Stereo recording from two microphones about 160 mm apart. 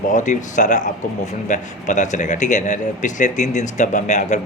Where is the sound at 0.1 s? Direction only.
50° left (ahead or behind).